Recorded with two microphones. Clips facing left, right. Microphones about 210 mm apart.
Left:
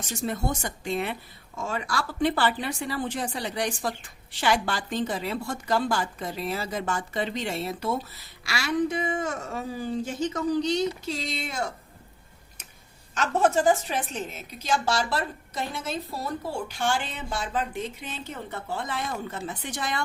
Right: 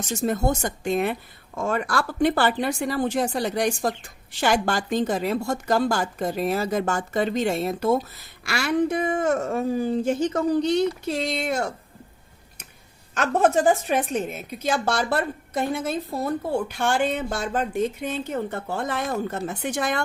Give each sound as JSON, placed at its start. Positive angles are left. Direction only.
{"t": 0.0, "sound": "a woman's voice", "side_deg": -45}
{"t": 13.1, "sound": "a woman's voice", "side_deg": -55}